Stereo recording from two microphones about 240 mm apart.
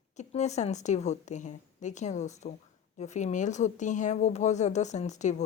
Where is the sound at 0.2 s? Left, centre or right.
Left.